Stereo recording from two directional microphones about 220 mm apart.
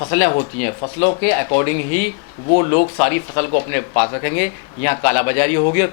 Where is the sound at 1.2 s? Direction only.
15° left (ahead or behind).